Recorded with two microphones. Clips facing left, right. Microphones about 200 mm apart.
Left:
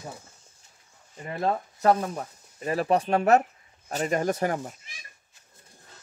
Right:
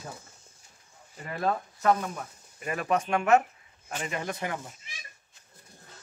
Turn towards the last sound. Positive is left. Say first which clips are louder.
# left 8 dB
turn(degrees=40)  # may be behind; listen again after turning